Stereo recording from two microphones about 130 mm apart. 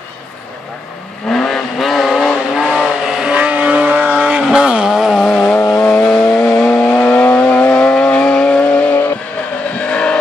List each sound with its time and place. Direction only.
1.3 s vehicle: centre (ahead or behind)